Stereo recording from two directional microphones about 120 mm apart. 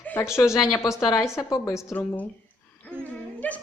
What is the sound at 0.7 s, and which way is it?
A woman's voice, 25° left (ahead or behind).